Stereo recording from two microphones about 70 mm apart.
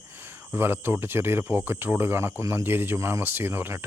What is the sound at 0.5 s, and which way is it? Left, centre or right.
Speech, right.